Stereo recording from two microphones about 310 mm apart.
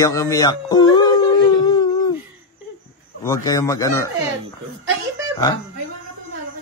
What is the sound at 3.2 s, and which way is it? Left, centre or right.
Speech, centre.